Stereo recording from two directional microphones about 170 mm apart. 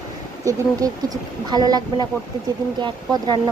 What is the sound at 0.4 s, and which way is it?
Speech, 20° right (ahead or behind).